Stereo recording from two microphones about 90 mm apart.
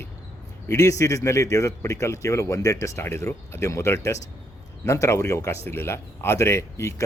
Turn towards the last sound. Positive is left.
turn(degrees=35)  # may be behind; listen again after turning